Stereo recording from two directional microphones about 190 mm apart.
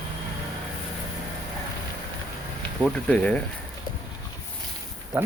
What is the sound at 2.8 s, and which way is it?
Speech, 5° left (ahead or behind).